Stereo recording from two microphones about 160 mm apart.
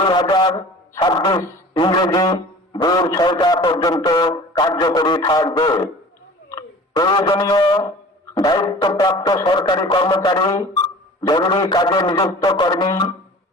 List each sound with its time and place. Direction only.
0.0 s a man's voice: 25° left (ahead or behind)